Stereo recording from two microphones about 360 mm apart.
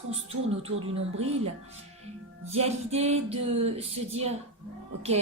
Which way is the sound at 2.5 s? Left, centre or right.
Centre.